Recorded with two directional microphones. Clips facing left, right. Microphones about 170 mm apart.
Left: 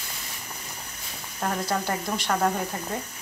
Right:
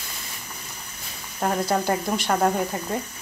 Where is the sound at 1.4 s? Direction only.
30° right (ahead or behind).